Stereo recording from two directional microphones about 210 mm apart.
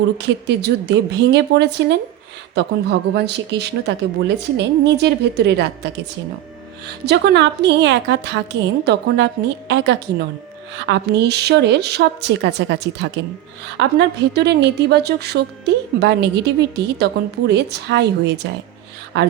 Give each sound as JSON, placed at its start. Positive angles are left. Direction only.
{"t": 0.2, "sound": "a woman's voice", "side_deg": -55}